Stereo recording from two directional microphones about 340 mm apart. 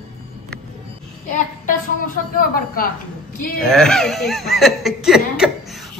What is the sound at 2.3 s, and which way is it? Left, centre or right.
Speech, left.